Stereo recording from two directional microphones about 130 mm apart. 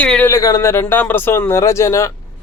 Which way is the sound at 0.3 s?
25° left (ahead or behind).